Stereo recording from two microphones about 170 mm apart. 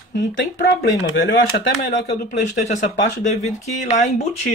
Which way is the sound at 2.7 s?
45° left (ahead or behind).